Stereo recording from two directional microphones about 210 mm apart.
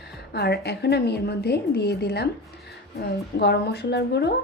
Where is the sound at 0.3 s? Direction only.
50° left (ahead or behind).